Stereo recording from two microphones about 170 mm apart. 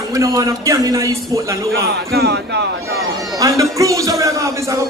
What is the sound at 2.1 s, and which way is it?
Speech, 85° right.